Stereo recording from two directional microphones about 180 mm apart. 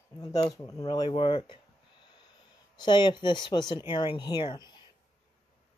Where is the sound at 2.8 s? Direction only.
25° left (ahead or behind).